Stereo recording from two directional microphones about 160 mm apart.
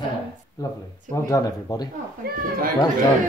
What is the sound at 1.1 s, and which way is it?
Speech, 20° left (ahead or behind).